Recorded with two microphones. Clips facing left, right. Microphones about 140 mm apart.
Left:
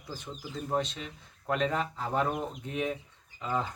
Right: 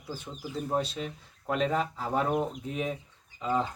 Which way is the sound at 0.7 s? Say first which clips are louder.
Even; 5° right (ahead or behind).